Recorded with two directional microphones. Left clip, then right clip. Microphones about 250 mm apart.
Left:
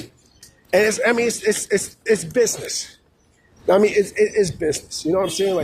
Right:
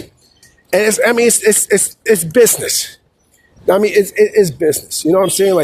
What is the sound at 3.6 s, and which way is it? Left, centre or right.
Speech, right.